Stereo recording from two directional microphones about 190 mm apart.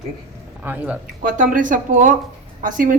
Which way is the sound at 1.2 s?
45° right (ahead or behind).